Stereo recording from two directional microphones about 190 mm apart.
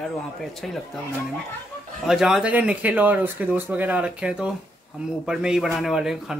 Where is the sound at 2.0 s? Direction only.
Centre (ahead or behind).